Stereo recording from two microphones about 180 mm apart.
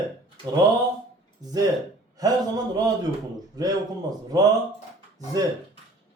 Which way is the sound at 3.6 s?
20° right (ahead or behind).